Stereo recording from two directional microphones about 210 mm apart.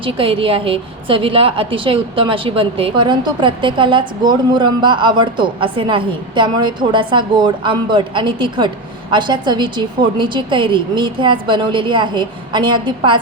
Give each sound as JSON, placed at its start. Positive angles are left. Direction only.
{"t": 0.0, "sound": "a woman's voice", "side_deg": -25}